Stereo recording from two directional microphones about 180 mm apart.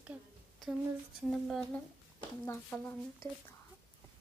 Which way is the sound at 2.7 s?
5° left (ahead or behind).